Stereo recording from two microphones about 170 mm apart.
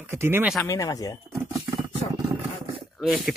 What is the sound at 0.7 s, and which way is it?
Speech, 20° left (ahead or behind).